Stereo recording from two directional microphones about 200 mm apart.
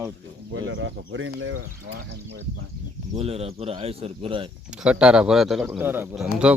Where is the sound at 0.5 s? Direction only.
70° right (ahead or behind).